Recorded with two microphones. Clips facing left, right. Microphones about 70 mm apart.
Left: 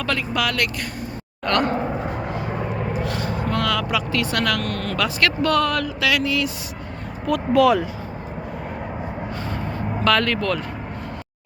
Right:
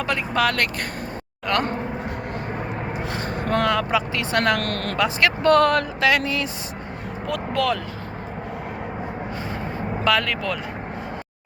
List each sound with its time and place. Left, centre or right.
0.3 s vehicle: right
3.0 s speech: right
3.2 s vehicle: right
3.7 s speech: right
4.6 s speech: right
4.9 s speech: right
5.5 s vehicle: right
7.3 s speech: centre
10.0 s speech: centre